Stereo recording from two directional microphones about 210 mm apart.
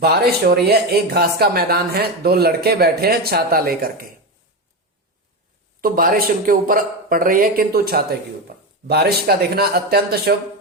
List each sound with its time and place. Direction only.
0.0 s speech: 50° right (ahead or behind)
5.8 s speech: 45° right (ahead or behind)